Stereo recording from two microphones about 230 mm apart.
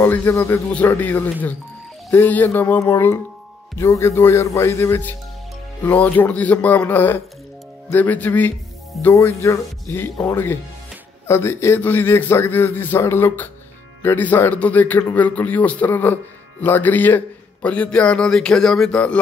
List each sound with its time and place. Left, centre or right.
0.0 s a man's voice: centre